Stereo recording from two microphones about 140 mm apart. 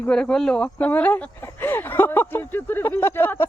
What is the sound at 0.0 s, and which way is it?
Speech, 5° left (ahead or behind).